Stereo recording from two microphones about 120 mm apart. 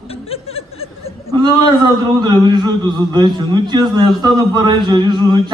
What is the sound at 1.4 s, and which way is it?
A man's voice, 35° right (ahead or behind).